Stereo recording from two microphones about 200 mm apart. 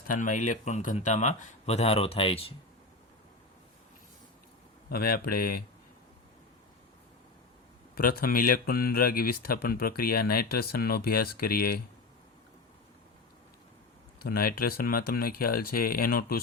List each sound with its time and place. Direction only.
0.1 s speech: 40° left (ahead or behind)
4.9 s speech: 50° left (ahead or behind)
7.9 s speech: 45° left (ahead or behind)
14.3 s speech: 50° left (ahead or behind)